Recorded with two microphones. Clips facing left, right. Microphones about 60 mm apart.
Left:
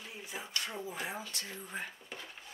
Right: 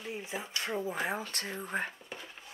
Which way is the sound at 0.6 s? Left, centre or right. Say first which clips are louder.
Right 6 dB; right.